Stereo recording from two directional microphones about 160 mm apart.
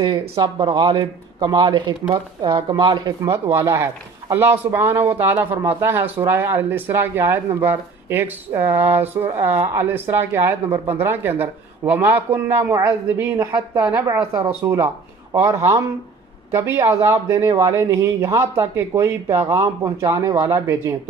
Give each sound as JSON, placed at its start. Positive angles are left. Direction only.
{"t": 0.4, "sound": "speech", "side_deg": -25}